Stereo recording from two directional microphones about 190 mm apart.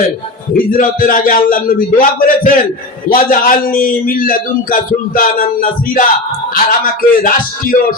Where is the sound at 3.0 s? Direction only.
45° left (ahead or behind).